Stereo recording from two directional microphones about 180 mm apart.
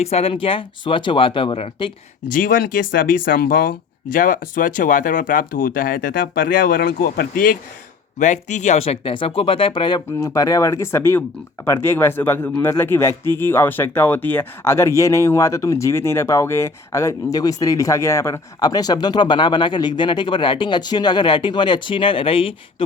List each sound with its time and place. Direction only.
0.0 s speech: 35° left (ahead or behind)
2.3 s a man's voice: 50° left (ahead or behind); by 22.5 s 30° left (ahead or behind)